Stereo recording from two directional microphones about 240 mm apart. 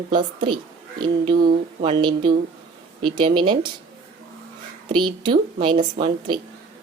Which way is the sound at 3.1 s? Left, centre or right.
Centre.